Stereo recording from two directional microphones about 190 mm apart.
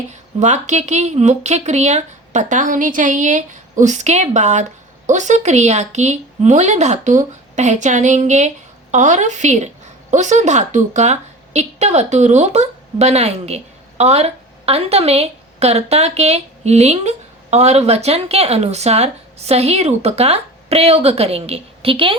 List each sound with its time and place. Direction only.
0.1 s a woman's voice: 40° right (ahead or behind)